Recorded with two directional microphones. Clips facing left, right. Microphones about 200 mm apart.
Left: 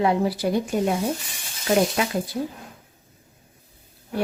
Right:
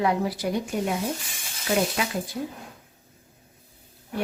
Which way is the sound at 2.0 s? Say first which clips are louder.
Left 4 dB; 40° left (ahead or behind).